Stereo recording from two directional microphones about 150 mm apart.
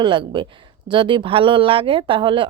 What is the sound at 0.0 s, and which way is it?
A woman's voice, 35° right (ahead or behind).